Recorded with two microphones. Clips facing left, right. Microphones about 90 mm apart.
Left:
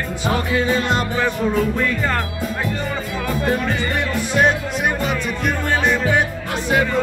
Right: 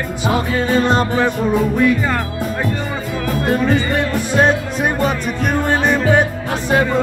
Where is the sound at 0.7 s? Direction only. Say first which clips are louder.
Right 5 dB; 35° right (ahead or behind).